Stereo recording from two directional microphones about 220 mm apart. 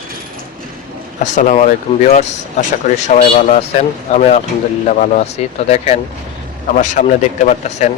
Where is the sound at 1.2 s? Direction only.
35° left (ahead or behind).